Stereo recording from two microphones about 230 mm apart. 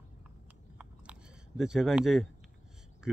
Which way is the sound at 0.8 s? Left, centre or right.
Centre.